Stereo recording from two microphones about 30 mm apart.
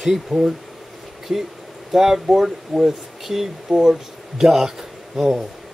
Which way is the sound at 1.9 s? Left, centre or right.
Centre.